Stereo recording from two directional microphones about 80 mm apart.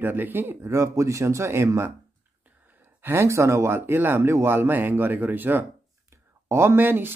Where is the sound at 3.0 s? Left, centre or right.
Right.